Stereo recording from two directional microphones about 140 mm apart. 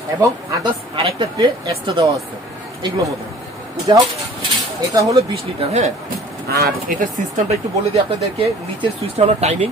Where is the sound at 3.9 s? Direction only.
35° right (ahead or behind).